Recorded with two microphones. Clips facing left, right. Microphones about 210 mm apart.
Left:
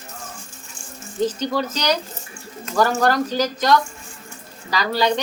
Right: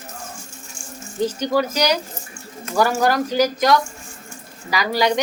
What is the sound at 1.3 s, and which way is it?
A woman's voice, 10° right (ahead or behind).